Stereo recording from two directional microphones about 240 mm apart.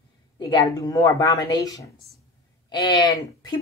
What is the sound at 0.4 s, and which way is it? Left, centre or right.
A woman's voice, centre.